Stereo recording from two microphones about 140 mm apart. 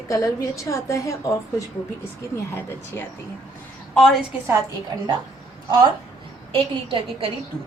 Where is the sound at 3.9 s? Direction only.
Centre (ahead or behind).